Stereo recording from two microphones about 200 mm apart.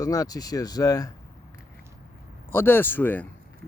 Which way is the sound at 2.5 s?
10° left (ahead or behind).